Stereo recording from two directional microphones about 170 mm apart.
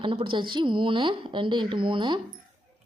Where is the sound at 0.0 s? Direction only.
30° right (ahead or behind).